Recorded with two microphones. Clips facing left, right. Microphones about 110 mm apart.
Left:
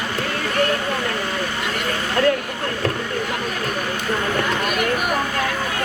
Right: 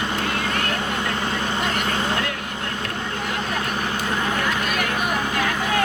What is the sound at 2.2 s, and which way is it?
Speech, 45° left (ahead or behind).